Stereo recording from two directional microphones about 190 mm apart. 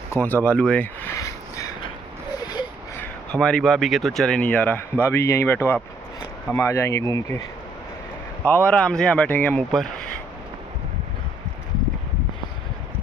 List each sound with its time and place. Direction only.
0.1 s speech: 10° left (ahead or behind)
2.5 s a sound: 20° left (ahead or behind)
3.3 s speech: 5° left (ahead or behind)
8.4 s speech: 5° left (ahead or behind)